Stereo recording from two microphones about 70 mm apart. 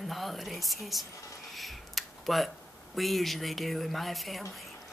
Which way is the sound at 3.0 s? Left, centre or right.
Centre.